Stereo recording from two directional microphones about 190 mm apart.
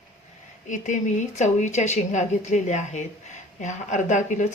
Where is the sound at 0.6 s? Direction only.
40° left (ahead or behind).